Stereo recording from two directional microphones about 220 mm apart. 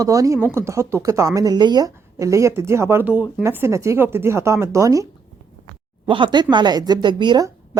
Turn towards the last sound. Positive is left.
turn(degrees=-15)  # may be behind; listen again after turning